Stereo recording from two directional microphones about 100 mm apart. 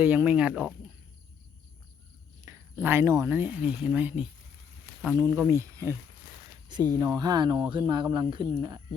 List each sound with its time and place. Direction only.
0.0 s speech: 15° right (ahead or behind)
2.4 s a sound: 30° right (ahead or behind)
3.1 s speech: 35° right (ahead or behind)
3.3 s speech: 20° right (ahead or behind)
5.1 s speech: 35° right (ahead or behind)
6.7 s speech: 45° right (ahead or behind)